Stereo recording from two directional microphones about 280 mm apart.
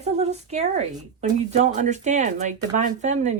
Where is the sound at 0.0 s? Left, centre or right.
Right.